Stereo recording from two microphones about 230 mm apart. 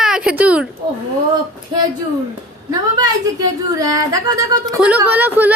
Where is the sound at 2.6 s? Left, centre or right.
Centre.